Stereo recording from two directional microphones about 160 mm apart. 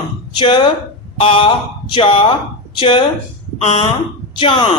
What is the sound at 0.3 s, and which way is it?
Speech, 30° left (ahead or behind).